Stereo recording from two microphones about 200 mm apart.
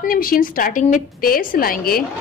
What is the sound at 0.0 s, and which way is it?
A woman's voice, 45° left (ahead or behind).